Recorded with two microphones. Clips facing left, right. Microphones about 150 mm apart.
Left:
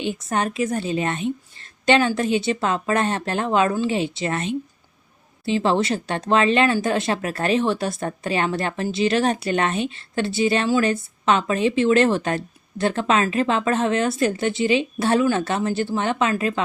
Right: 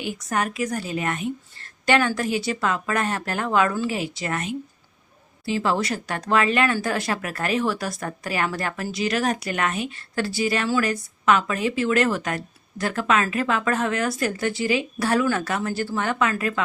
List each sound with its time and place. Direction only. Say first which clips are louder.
0.0 s speech: left 2 dB; 25° left (ahead or behind)